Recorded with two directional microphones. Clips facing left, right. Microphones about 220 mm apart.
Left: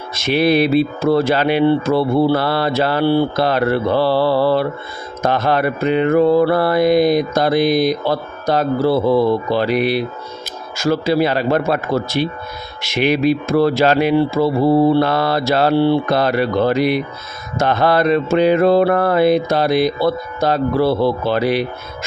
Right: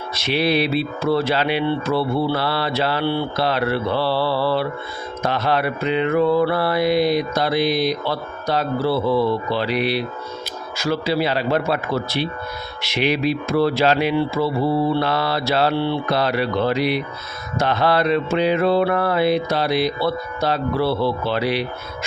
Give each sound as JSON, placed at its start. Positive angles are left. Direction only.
{"t": 0.1, "sound": "mantra", "side_deg": 45}